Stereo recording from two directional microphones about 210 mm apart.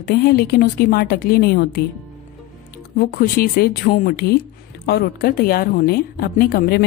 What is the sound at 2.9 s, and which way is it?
A woman's voice, 45° left (ahead or behind).